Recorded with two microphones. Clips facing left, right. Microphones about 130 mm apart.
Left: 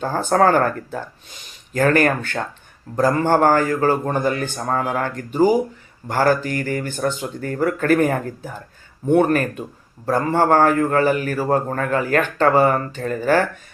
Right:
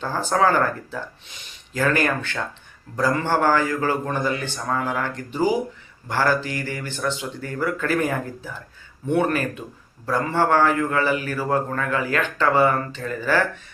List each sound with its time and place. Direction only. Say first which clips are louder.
0.0 s a man's voice: left 4 dB; 50° left (ahead or behind)